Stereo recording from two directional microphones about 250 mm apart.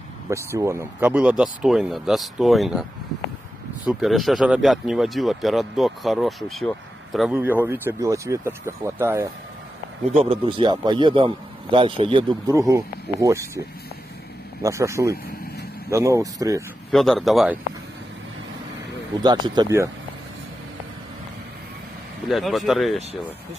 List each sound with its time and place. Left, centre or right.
0.3 s speech: centre
10.1 s a man's voice: right
14.6 s speech: centre
16.9 s speech: centre
19.2 s speech: centre
22.3 s speech: centre